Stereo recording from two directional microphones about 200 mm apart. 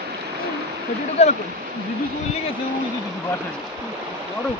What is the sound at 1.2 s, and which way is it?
Speech, 30° left (ahead or behind).